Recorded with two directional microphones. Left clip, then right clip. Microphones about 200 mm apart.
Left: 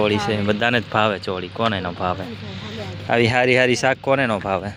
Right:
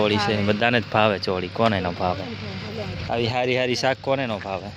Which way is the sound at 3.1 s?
25° left (ahead or behind).